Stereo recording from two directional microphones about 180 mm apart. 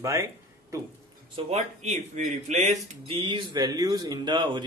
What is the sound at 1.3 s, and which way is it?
Speech, 40° right (ahead or behind).